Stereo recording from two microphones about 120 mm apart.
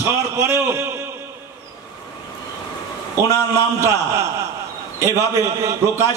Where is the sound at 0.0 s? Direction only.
25° right (ahead or behind).